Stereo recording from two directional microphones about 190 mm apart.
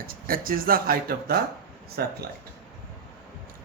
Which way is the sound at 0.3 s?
50° right (ahead or behind).